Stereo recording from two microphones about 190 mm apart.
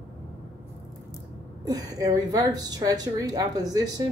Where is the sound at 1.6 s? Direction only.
20° right (ahead or behind).